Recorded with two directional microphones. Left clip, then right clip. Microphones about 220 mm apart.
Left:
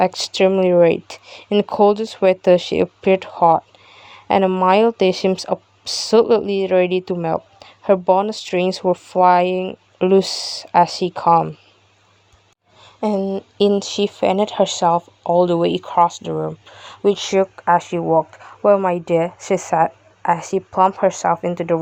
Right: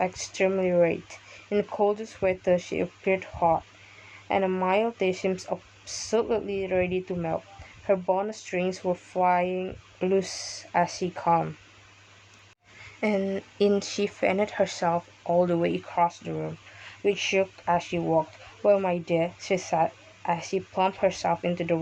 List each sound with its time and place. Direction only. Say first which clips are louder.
0.0 s speech: left 10 dB; 35° left (ahead or behind)
13.2 s speech: left 7 dB; 5° right (ahead or behind)
13.7 s a woman's voice: left 8 dB; 20° left (ahead or behind)